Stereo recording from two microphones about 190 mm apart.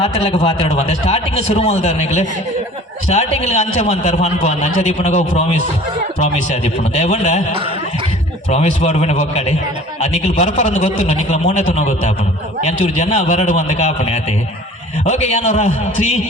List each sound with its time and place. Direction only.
0.0 s a man's voice: 30° left (ahead or behind)
8.4 s a man's voice: 35° left (ahead or behind)